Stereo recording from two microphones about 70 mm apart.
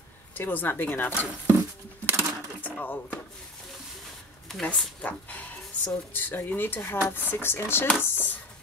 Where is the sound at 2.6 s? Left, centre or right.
Left.